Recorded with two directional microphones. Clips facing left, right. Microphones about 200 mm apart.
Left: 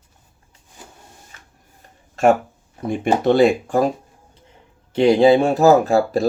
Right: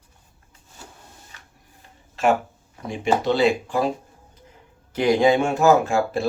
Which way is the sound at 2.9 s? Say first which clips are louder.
Left 4 dB; 55° left (ahead or behind).